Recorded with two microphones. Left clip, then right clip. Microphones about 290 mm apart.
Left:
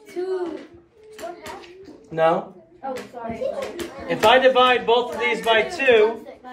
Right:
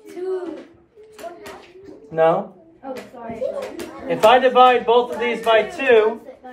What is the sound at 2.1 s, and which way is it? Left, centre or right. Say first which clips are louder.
Speech: right 2 dB; centre.